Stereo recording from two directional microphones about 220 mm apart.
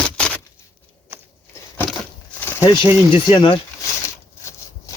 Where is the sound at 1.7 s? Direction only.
10° left (ahead or behind).